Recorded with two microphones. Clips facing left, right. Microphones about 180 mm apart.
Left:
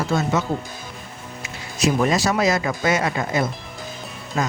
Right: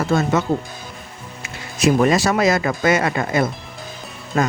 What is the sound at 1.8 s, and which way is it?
Speech, 55° right (ahead or behind).